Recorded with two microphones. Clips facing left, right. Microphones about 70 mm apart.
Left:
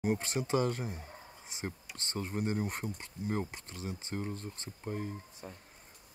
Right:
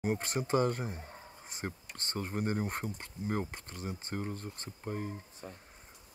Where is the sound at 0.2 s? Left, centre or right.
Right.